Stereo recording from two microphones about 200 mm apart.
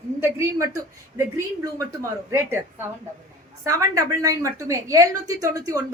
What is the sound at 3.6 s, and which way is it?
A woman's voice, 15° right (ahead or behind).